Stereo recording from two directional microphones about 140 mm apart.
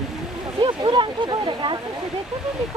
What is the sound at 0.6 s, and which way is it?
Speech, 35° right (ahead or behind).